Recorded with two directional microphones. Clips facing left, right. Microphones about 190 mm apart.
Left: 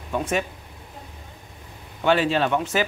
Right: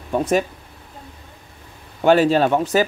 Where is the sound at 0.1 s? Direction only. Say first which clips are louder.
Right 6 dB; 40° right (ahead or behind).